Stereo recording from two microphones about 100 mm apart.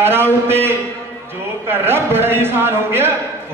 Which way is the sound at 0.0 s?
25° right (ahead or behind).